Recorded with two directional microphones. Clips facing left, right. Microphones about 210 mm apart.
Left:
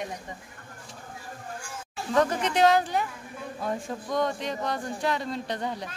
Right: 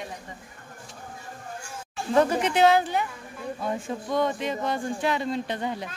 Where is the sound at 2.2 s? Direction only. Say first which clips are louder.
Right 2 dB; 5° right (ahead or behind).